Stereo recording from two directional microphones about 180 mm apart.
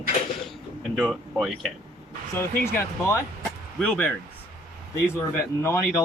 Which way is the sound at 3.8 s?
5° left (ahead or behind).